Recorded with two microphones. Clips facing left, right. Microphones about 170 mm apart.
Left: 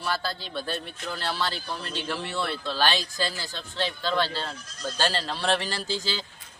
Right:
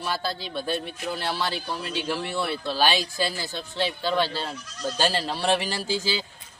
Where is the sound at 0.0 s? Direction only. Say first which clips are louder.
Right 1 dB; 10° right (ahead or behind).